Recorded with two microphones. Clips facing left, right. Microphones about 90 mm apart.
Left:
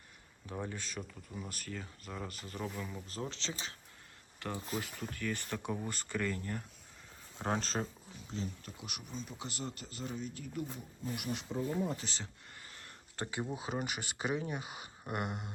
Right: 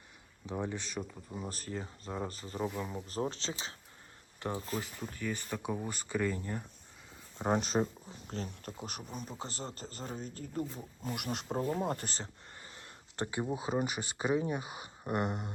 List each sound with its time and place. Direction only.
0.4 s speech: 20° right (ahead or behind); by 4.9 s 35° right (ahead or behind)
5.2 s speech: 10° right (ahead or behind)
8.0 s speech: 40° right (ahead or behind)
11.0 s speech: 65° right (ahead or behind)
12.0 s speech: 40° right (ahead or behind)
12.5 s a sound: 25° right (ahead or behind)
13.3 s speech: 25° right (ahead or behind)